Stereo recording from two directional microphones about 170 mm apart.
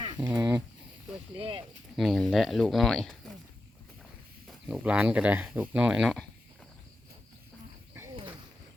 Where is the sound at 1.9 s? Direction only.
Centre (ahead or behind).